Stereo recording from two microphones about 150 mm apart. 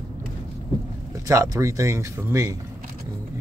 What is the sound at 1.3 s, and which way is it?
Speech, 20° right (ahead or behind).